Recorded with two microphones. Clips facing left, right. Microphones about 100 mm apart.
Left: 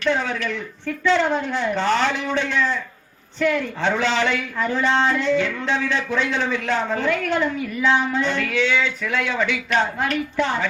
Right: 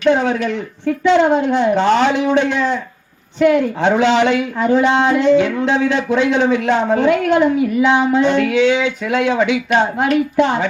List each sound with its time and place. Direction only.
0.0 s speech: 20° right (ahead or behind)
3.8 s speech: 20° right (ahead or behind)